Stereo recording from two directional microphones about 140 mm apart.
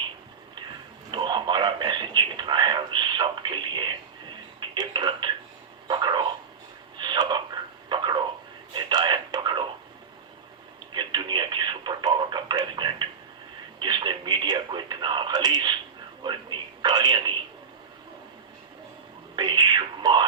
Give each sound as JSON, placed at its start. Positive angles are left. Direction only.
{"t": 1.1, "sound": "a sound", "side_deg": -35}
{"t": 6.9, "sound": "radio", "side_deg": -30}
{"t": 8.7, "sound": "a sound", "side_deg": -30}
{"t": 10.9, "sound": "radio", "side_deg": -30}
{"t": 13.7, "sound": "television", "side_deg": -30}
{"t": 19.4, "sound": "whispering", "side_deg": -30}